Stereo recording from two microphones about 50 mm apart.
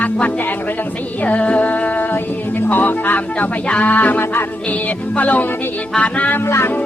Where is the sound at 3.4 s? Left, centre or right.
Left.